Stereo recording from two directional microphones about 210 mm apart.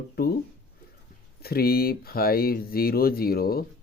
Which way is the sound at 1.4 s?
45° left (ahead or behind).